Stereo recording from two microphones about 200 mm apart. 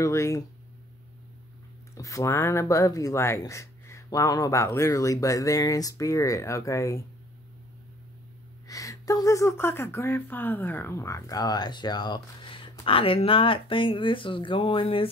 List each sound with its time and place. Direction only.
0.0 s speech: 15° left (ahead or behind)
2.0 s speech: 15° left (ahead or behind)
8.6 s speech: 15° left (ahead or behind)